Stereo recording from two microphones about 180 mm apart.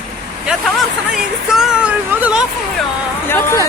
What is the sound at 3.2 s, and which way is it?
Speech, 15° left (ahead or behind).